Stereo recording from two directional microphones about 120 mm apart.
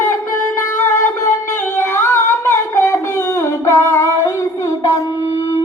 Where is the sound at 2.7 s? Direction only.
25° left (ahead or behind).